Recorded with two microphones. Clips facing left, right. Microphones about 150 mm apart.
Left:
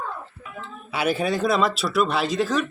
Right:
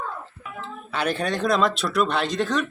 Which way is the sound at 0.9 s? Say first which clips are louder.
Left 2 dB; 10° left (ahead or behind).